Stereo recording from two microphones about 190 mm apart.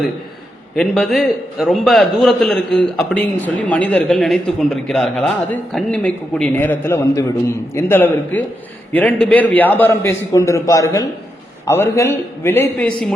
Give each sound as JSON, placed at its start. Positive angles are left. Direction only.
{"t": 0.8, "sound": "a man's voice", "side_deg": 5}